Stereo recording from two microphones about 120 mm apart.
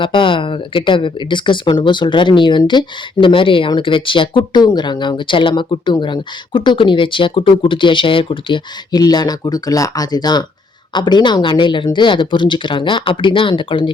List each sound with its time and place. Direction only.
0.0 s a woman's voice: 45° left (ahead or behind)